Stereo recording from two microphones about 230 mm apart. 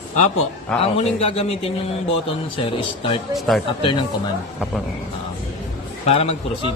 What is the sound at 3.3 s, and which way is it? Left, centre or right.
Speech, centre.